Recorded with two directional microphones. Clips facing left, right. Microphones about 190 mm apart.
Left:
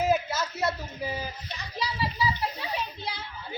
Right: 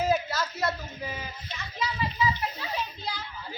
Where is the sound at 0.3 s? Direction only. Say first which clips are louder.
Left 1 dB; 20° left (ahead or behind).